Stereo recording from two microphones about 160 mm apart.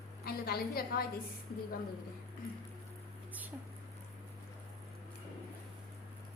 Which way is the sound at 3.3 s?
10° right (ahead or behind).